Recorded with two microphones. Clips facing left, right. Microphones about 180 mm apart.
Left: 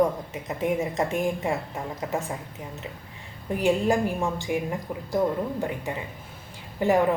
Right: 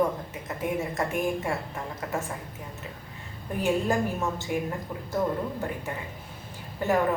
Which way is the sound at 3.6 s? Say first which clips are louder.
Left 3 dB; 15° left (ahead or behind).